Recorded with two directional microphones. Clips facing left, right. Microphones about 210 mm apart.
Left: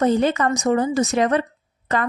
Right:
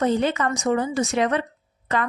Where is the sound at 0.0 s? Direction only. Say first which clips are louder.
Left 3 dB; 40° left (ahead or behind).